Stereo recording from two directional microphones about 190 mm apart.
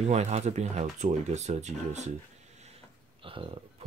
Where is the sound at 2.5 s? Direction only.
35° right (ahead or behind).